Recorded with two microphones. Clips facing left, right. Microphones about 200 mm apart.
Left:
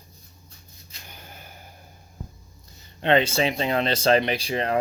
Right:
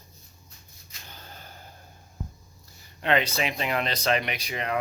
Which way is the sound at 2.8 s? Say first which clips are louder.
Left 5 dB; 30° left (ahead or behind).